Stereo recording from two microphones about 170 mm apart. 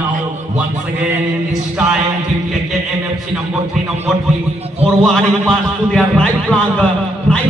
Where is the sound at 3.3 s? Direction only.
Centre (ahead or behind).